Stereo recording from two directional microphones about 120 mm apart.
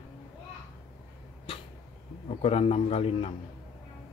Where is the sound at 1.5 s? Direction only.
50° left (ahead or behind).